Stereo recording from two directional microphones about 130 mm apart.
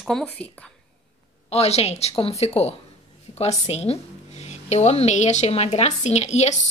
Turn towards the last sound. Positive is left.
turn(degrees=60)  # may be behind; listen again after turning